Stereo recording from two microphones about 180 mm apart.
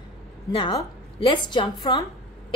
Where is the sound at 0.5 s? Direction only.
25° left (ahead or behind).